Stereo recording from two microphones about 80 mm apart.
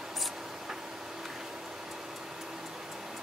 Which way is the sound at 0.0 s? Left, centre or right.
Centre.